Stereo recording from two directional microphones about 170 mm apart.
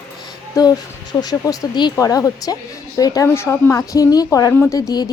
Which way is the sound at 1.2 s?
25° left (ahead or behind).